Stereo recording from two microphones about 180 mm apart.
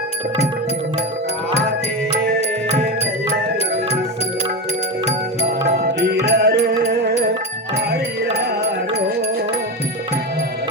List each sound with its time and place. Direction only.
5.8 s music: 60° right (ahead or behind)